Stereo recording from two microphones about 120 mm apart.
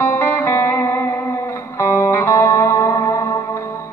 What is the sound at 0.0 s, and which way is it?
Music, 20° left (ahead or behind).